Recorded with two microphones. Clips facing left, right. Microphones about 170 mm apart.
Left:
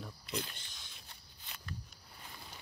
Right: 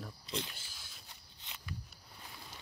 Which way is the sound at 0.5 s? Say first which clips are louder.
Even; 5° right (ahead or behind).